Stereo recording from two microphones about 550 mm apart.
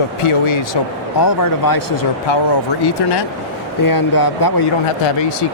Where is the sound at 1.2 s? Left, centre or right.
Left.